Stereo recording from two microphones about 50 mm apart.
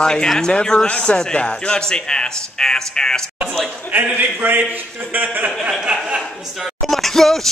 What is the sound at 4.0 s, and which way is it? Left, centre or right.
Speech, right.